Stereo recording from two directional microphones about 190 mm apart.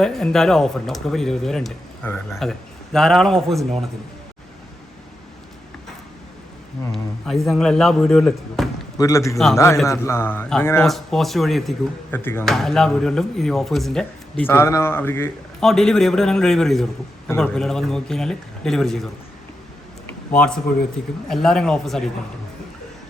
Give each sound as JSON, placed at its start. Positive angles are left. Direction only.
{"t": 0.0, "sound": "speech", "side_deg": 5}
{"t": 6.9, "sound": "speech", "side_deg": 0}
{"t": 9.0, "sound": "a man's voice", "side_deg": 15}
{"t": 10.8, "sound": "speech", "side_deg": 0}
{"t": 12.1, "sound": "a man's voice", "side_deg": 10}
{"t": 20.3, "sound": "speech", "side_deg": 5}